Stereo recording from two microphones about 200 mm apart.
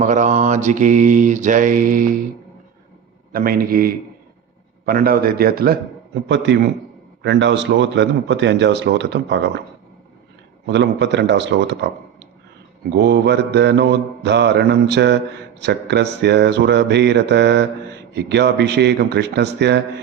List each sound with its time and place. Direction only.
0.0 s mantra: 40° right (ahead or behind)
3.3 s a man's voice: 45° right (ahead or behind)
6.2 s a man's voice: 60° right (ahead or behind)
10.7 s a man's voice: 60° right (ahead or behind)
12.9 s a man's voice: 55° right (ahead or behind)